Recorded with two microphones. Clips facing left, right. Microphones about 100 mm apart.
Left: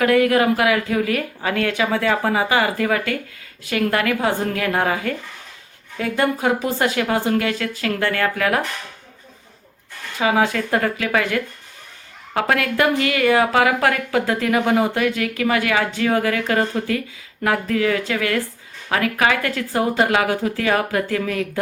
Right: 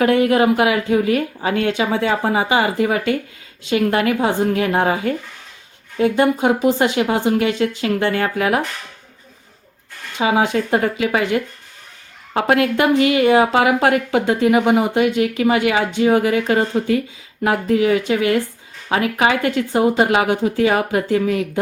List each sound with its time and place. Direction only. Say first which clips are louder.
0.0 s a woman's voice: right 2 dB; 25° right (ahead or behind)
10.2 s a woman's voice: right 2 dB; 20° right (ahead or behind)